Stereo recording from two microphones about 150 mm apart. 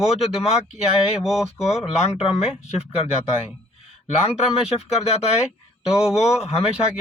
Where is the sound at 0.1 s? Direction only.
45° left (ahead or behind).